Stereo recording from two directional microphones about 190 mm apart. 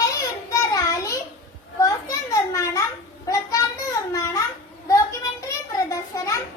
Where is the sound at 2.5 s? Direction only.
15° left (ahead or behind).